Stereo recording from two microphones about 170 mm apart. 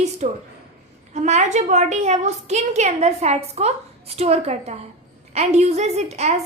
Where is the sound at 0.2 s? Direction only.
45° right (ahead or behind).